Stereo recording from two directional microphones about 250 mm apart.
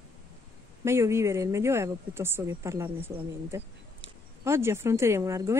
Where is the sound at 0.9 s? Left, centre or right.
Centre.